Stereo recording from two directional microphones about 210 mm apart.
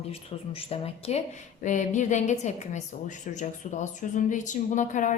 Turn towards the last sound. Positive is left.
turn(degrees=35)  # may be behind; listen again after turning